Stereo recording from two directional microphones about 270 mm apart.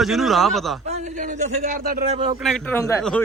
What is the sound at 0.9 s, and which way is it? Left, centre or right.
A man's voice, right.